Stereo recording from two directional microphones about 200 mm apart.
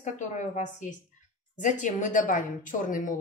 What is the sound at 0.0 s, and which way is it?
Speech, 40° left (ahead or behind).